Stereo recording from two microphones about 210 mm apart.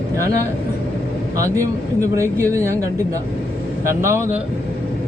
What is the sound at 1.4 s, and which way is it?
Speech, 15° right (ahead or behind).